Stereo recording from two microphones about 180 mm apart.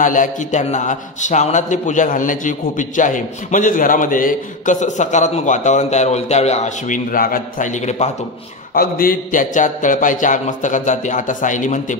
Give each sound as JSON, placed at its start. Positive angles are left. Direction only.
{"t": 0.0, "sound": "a man's voice", "side_deg": 45}
{"t": 8.7, "sound": "a man's voice", "side_deg": 55}